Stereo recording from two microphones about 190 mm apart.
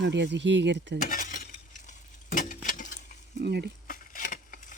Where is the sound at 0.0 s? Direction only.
65° right (ahead or behind).